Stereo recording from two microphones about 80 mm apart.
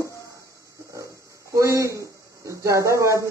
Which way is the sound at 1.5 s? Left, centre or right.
Right.